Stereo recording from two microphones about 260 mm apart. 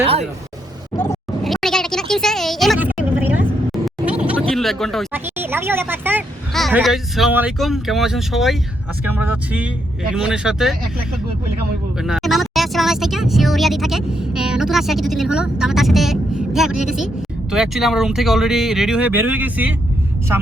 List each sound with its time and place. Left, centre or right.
0.0 s vehicle: right
0.9 s a sound: centre
4.2 s speech: centre
11.9 s speech: centre